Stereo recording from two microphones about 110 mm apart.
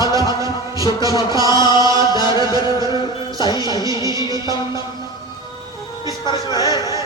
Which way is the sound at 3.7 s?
35° right (ahead or behind).